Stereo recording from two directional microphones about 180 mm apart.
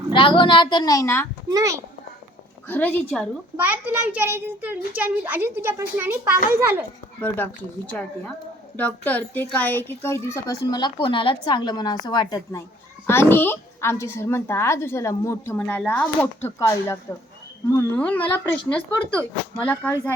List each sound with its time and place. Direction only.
0.1 s a woman's voice: 30° left (ahead or behind)
1.5 s a child's voice: 20° right (ahead or behind)
2.6 s a woman's voice: 10° left (ahead or behind)
3.6 s a child's voice: 10° right (ahead or behind)
7.2 s a woman's voice: 10° left (ahead or behind)
8.7 s a woman's voice: 10° left (ahead or behind)